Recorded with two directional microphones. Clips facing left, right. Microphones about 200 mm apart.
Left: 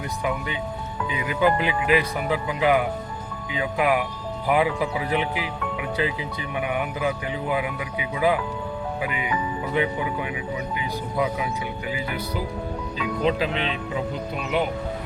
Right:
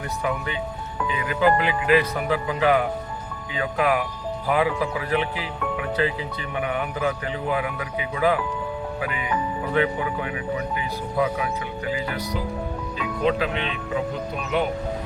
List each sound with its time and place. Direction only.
1.1 s speech: 15° left (ahead or behind)
13.2 s speech: 30° left (ahead or behind)